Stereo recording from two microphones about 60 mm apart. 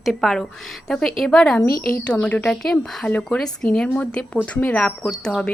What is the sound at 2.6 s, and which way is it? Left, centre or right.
A woman's voice, centre.